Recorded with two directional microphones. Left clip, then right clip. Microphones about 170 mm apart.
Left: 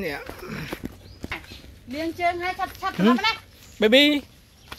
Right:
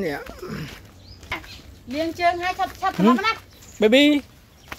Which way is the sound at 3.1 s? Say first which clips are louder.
Right 1 dB; 65° right (ahead or behind).